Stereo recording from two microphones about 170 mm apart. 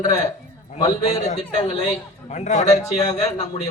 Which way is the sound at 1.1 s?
45° left (ahead or behind).